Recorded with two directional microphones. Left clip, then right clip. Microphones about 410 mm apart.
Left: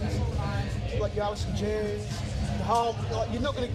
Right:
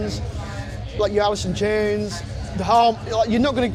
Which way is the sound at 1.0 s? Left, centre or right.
Right.